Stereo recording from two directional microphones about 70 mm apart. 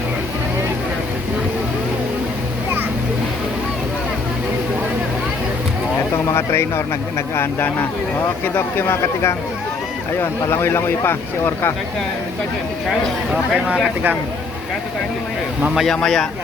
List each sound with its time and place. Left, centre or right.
6.3 s speech: left
12.9 s speech: centre
15.7 s speech: centre